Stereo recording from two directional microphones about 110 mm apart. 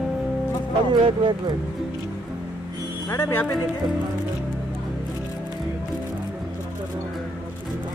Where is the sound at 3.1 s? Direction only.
20° left (ahead or behind).